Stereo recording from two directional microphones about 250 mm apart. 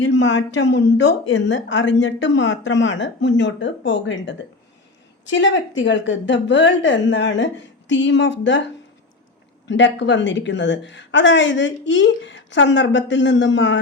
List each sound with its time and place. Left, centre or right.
0.0 s a woman's voice: left
9.6 s a woman's voice: left